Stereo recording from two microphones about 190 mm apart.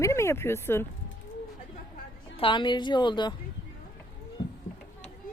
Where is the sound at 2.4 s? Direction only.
25° left (ahead or behind).